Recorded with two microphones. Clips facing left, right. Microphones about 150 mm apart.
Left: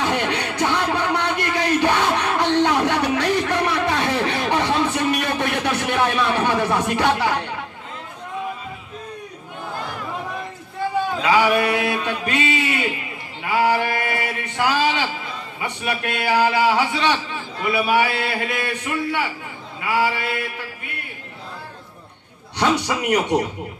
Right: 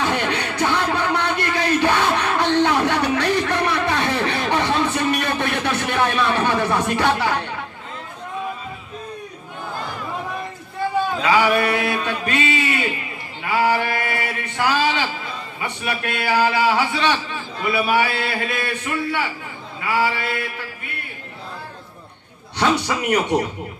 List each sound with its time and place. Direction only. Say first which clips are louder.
0.0 s a sound: even; 15° left (ahead or behind)
11.2 s speech: left 1 dB; 20° left (ahead or behind)
13.4 s a sound: even; 20° left (ahead or behind)
15.6 s a man's voice: left 1 dB; 20° left (ahead or behind)
19.8 s mantra: even; 15° left (ahead or behind)
22.5 s mantra: even; 15° left (ahead or behind)